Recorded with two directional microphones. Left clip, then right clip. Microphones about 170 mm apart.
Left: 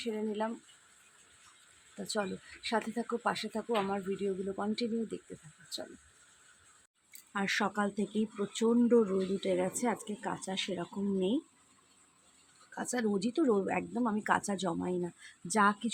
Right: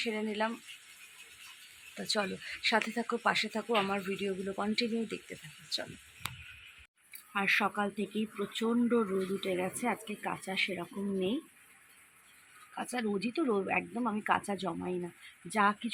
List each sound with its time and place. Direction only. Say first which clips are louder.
0.0 s speech: right 2 dB; 10° left (ahead or behind)
2.0 s speech: right 3 dB; 10° left (ahead or behind)
7.3 s speech: right 3 dB; 10° left (ahead or behind)
12.7 s speech: left 1 dB; 15° left (ahead or behind)